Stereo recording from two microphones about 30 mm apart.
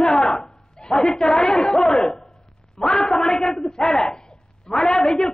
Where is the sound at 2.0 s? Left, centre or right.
Left.